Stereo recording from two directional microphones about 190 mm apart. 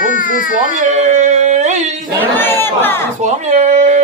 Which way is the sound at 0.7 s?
40° right (ahead or behind).